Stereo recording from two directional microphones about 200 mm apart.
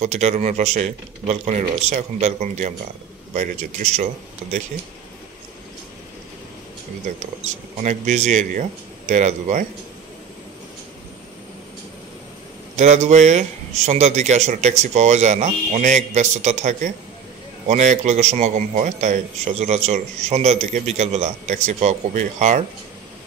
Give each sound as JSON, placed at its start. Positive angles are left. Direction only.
{"t": 0.0, "sound": "a man's voice", "side_deg": -35}
{"t": 7.8, "sound": "a man's voice", "side_deg": -40}
{"t": 12.7, "sound": "a man's voice", "side_deg": -35}